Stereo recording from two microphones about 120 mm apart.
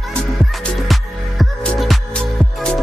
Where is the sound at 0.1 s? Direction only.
Centre (ahead or behind).